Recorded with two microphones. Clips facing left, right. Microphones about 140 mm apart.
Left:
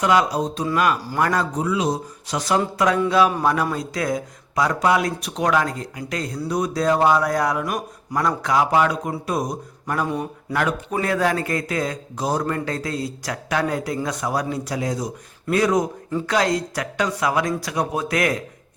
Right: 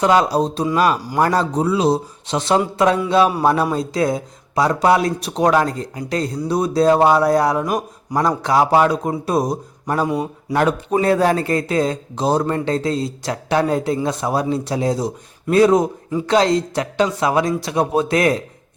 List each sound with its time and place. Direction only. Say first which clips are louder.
0.0 s a man's voice: right 4 dB; 30° right (ahead or behind)